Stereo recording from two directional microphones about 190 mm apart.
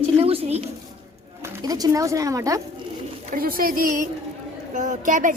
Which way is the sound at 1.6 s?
20° right (ahead or behind).